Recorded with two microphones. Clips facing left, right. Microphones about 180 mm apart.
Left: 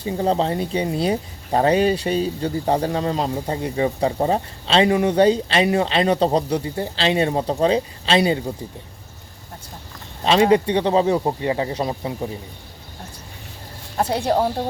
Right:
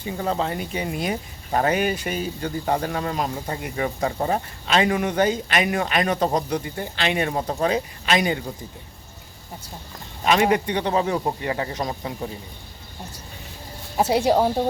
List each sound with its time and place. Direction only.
0.0 s speech: 30° left (ahead or behind)
10.5 s speech: 30° left (ahead or behind)
13.9 s a woman's voice: 5° right (ahead or behind)